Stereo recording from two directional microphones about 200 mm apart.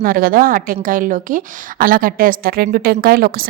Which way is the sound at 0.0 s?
45° right (ahead or behind).